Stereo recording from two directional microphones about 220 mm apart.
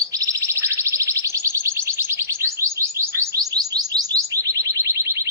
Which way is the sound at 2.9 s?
10° right (ahead or behind).